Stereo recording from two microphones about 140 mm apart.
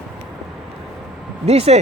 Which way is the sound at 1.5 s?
45° right (ahead or behind).